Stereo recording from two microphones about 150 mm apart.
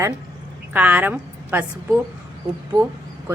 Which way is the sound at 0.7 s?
10° right (ahead or behind).